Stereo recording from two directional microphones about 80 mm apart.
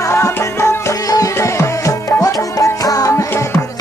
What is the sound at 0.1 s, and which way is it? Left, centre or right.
Music, left.